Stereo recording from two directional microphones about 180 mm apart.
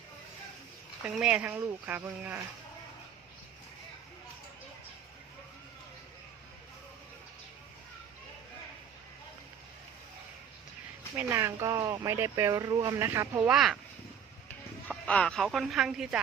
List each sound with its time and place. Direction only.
1.0 s speech: 5° right (ahead or behind)
11.1 s speech: 15° right (ahead or behind)
13.5 s speech: centre (ahead or behind)